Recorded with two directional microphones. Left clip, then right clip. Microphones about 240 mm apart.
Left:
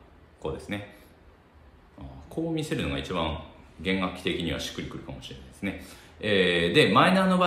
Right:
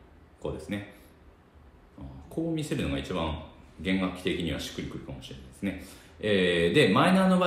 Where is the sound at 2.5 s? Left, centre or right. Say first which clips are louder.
Left 2 dB; centre.